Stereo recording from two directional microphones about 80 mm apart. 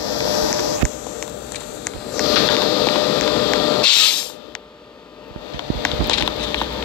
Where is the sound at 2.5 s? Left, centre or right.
Centre.